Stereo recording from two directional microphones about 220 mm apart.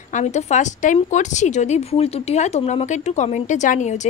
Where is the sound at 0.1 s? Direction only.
30° left (ahead or behind).